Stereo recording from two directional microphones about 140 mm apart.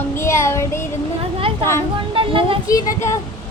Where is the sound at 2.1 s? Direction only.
40° right (ahead or behind).